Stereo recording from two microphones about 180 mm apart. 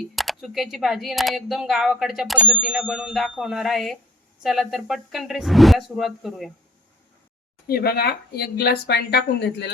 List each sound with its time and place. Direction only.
0.0 s speech: centre (ahead or behind)
7.7 s speech: 60° left (ahead or behind)